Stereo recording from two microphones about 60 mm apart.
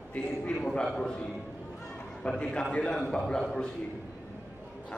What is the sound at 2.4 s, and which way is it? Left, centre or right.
A man's voice, centre.